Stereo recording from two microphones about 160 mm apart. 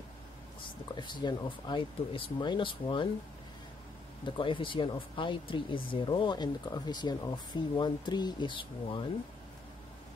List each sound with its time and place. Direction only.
0.9 s speech: 30° left (ahead or behind)
4.3 s speech: 30° left (ahead or behind)